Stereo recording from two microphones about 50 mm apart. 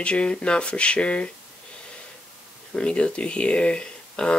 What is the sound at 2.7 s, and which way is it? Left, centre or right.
Speech, left.